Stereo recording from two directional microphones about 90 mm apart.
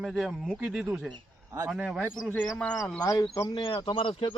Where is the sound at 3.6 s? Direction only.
85° left; by 4.3 s 70° left (ahead or behind).